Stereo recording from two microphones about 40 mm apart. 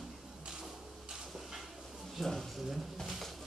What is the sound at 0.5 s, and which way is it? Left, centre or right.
Printer, centre.